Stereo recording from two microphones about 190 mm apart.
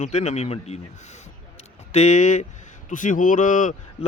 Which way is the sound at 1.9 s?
40° left (ahead or behind).